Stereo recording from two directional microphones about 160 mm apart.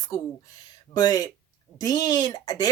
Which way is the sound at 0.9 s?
25° left (ahead or behind).